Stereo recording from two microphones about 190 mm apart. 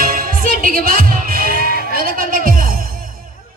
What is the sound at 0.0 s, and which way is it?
Music, 45° right (ahead or behind).